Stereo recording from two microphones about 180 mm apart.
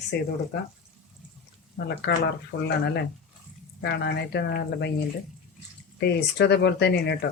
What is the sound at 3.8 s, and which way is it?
Speech, 65° left (ahead or behind).